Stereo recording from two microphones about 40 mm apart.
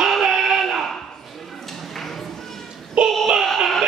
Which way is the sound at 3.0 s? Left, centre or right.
Right.